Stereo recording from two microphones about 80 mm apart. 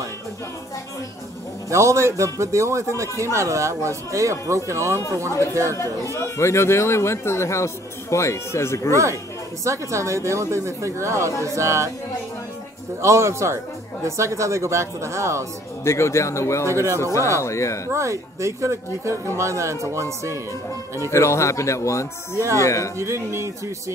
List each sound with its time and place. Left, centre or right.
1.7 s a man's voice: right
5.8 s a man's voice: left
9.7 s a man's voice: right
13.0 s a man's voice: right
15.8 s a man's voice: left
16.7 s a man's voice: right
17.0 s a man's voice: left
17.9 s a man's voice: right
21.1 s a man's voice: left
22.9 s a man's voice: right